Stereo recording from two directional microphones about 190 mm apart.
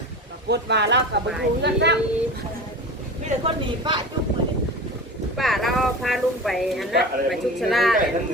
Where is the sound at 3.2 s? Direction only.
30° right (ahead or behind).